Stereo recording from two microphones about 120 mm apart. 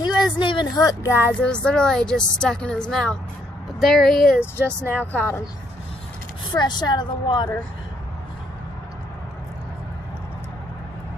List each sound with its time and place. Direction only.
0.0 s speech: 40° left (ahead or behind); by 1.3 s 20° left (ahead or behind)
1.4 s speech: 10° left (ahead or behind)
4.8 s speech: 15° left (ahead or behind)
6.5 s a woman's voice: 40° left (ahead or behind)